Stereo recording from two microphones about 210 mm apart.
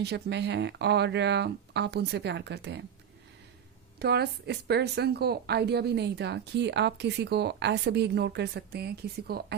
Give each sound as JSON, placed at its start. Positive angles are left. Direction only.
{"t": 0.0, "sound": "a woman's voice", "side_deg": -55}
{"t": 4.0, "sound": "a woman's voice", "side_deg": -50}